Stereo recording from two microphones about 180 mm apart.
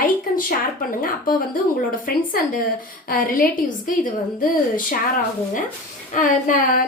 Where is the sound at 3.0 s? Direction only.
50° left (ahead or behind).